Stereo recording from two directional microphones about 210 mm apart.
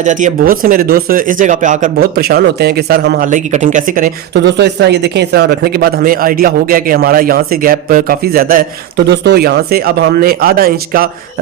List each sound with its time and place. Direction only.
0.0 s speech: 35° right (ahead or behind)
3.2 s speech: 35° right (ahead or behind)